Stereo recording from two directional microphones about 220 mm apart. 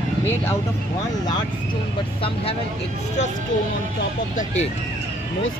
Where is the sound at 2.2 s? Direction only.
25° left (ahead or behind).